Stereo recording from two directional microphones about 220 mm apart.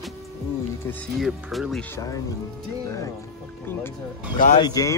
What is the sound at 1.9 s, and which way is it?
Speech, 15° left (ahead or behind).